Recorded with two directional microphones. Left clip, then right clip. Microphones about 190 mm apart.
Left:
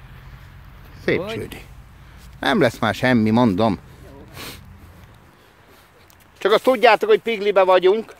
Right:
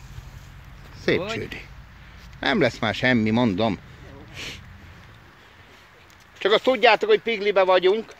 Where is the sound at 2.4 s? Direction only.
25° left (ahead or behind).